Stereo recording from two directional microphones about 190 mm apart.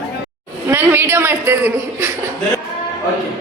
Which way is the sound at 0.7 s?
10° right (ahead or behind).